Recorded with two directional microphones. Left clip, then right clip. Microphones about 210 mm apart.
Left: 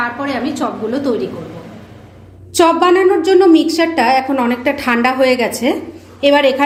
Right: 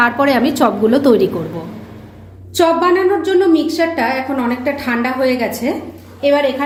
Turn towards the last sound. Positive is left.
turn(degrees=45)  # may be behind; listen again after turning